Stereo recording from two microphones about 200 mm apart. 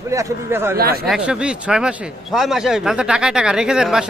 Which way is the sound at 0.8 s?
50° right (ahead or behind).